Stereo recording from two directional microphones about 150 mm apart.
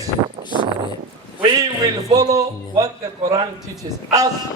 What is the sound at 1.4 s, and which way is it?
A man's voice, 25° right (ahead or behind).